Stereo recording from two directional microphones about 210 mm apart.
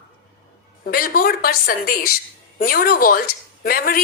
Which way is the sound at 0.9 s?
45° left (ahead or behind).